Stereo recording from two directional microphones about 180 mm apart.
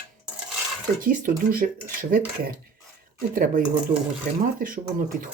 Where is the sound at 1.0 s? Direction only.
50° right (ahead or behind).